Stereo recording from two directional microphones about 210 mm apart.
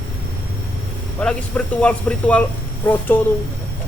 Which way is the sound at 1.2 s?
5° left (ahead or behind).